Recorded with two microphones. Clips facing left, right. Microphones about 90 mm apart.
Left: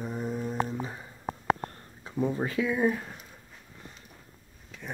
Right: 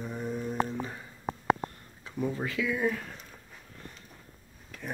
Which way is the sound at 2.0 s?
25° left (ahead or behind).